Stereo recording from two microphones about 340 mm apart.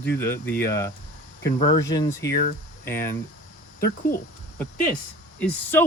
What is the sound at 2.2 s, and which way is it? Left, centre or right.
Speech, left.